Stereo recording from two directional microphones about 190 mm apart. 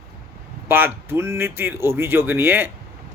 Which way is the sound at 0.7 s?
10° right (ahead or behind).